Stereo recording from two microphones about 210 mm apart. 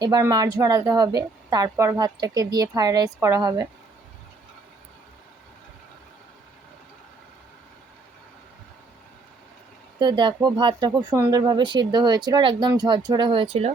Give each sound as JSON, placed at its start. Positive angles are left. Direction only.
{"t": 0.0, "sound": "a woman's voice", "side_deg": -20}
{"t": 10.0, "sound": "speech", "side_deg": -20}